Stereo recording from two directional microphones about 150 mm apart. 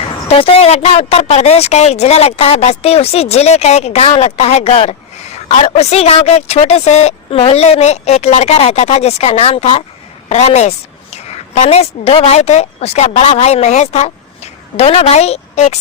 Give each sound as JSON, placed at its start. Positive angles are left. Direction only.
{"t": 0.3, "sound": "a woman's voice", "side_deg": 40}